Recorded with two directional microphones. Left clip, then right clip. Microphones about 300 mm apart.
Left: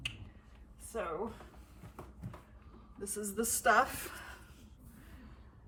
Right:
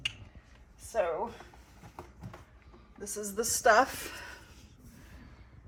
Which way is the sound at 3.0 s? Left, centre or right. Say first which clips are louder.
Right 3 dB; right.